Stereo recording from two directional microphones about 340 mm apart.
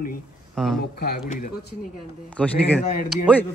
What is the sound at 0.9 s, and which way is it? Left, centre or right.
Speech, left.